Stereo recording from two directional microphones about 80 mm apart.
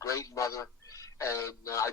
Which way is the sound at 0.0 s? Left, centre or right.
Left.